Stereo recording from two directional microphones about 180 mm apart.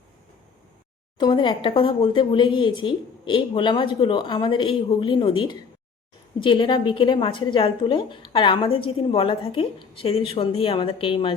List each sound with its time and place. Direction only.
1.2 s a woman's voice: 25° left (ahead or behind)